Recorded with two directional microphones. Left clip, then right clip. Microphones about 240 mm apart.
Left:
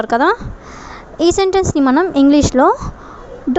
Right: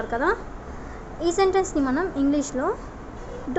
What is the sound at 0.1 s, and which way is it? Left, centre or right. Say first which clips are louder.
A woman's voice: left 10 dB; left.